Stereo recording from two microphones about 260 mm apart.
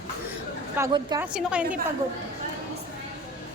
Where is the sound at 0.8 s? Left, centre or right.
Centre.